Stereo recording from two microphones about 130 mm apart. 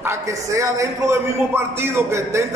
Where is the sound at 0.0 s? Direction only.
20° right (ahead or behind).